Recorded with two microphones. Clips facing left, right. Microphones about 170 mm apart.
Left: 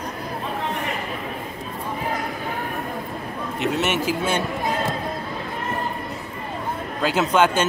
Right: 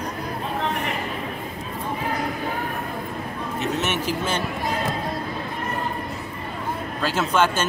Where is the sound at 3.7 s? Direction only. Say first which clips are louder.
Left 4 dB; 10° left (ahead or behind).